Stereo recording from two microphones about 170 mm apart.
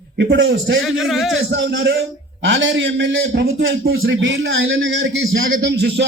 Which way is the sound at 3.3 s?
75° right (ahead or behind).